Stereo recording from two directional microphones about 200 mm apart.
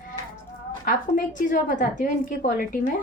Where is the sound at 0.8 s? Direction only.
40° left (ahead or behind).